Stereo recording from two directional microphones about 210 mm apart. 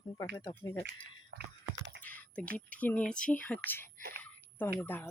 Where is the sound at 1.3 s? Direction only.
50° right (ahead or behind).